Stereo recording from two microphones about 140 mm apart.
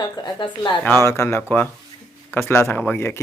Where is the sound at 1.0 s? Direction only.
20° left (ahead or behind).